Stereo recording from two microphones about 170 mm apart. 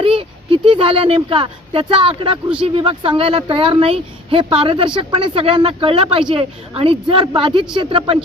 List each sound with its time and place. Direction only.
0.2 s speech: 35° right (ahead or behind)